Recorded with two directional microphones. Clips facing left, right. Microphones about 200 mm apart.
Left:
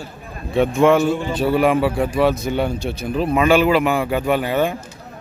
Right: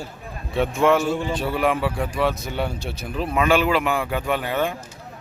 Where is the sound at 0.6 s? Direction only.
Centre (ahead or behind).